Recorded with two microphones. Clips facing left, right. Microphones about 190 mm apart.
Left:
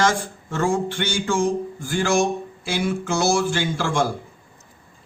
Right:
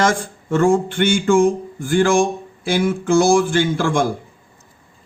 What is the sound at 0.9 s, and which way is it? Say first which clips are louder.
Speech: right 8 dB; 55° right (ahead or behind).